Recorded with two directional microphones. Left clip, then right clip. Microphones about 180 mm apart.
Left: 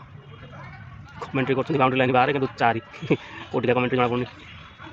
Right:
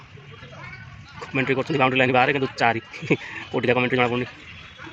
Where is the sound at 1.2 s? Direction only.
Centre (ahead or behind).